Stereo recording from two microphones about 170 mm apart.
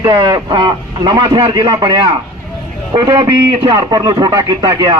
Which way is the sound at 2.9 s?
25° right (ahead or behind).